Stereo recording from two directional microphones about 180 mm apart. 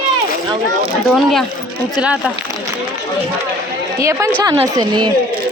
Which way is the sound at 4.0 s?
15° right (ahead or behind).